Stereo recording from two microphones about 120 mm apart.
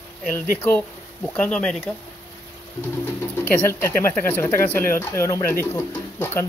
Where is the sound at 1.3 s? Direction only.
10° left (ahead or behind).